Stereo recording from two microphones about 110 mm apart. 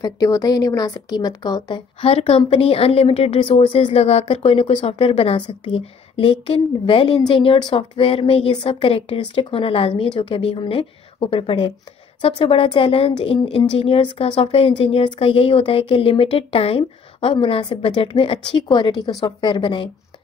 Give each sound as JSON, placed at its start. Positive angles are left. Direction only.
{"t": 0.0, "sound": "speech", "side_deg": 30}
{"t": 2.0, "sound": "a woman's voice", "side_deg": 60}